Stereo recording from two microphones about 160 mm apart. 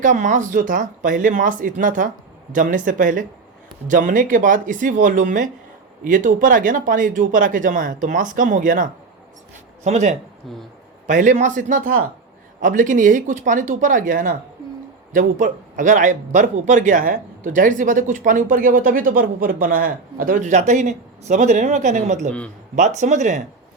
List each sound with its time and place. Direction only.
0.0 s a man's voice: 55° right (ahead or behind)